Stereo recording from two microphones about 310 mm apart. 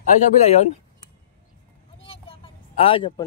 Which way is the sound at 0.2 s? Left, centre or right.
Left.